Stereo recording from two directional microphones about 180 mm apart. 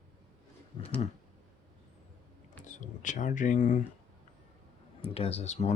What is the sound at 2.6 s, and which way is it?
Speech, 45° left (ahead or behind).